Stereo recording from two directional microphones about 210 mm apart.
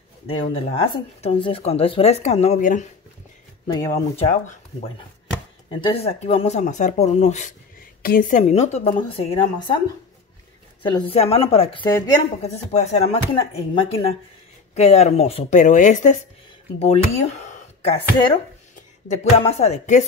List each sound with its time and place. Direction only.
0.3 s speech: 25° left (ahead or behind)
3.6 s speech: 15° left (ahead or behind)
5.7 s speech: 25° left (ahead or behind)
10.8 s speech: 20° left (ahead or behind)
12.4 s speech: 30° left (ahead or behind)